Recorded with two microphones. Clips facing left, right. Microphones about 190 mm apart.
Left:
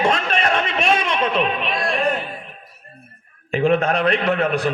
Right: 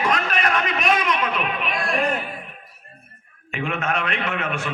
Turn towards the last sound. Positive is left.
turn(degrees=35)  # may be behind; listen again after turning